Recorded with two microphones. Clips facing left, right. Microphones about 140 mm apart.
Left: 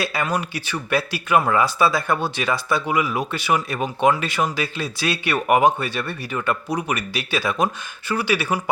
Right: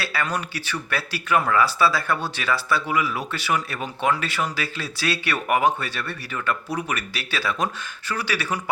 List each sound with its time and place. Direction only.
0.0 s speech: 20° left (ahead or behind)